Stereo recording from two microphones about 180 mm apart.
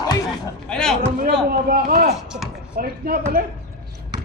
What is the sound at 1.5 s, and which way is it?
Speech, 55° right (ahead or behind).